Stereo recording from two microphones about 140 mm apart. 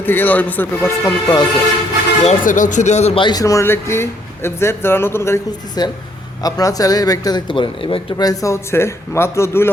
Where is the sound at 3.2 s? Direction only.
25° left (ahead or behind).